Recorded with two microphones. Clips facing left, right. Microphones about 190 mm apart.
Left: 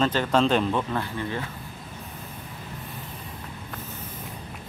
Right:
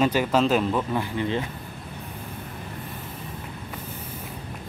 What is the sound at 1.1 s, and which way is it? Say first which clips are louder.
Speech: right 4 dB; 20° right (ahead or behind).